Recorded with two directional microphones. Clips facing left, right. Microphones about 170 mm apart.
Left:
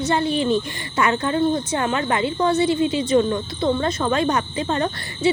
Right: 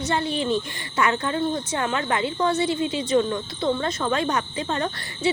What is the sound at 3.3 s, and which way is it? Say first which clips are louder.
Cricket: left 3 dB; 30° left (ahead or behind).